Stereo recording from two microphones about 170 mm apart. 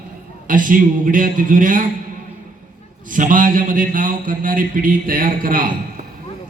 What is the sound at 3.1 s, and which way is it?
A man's voice, 50° right (ahead or behind).